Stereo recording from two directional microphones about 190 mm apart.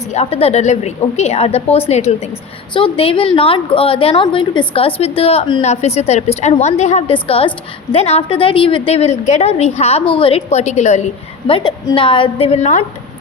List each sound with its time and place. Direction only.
0.1 s a woman's voice: 35° left (ahead or behind)
11.4 s a woman's voice: 25° left (ahead or behind)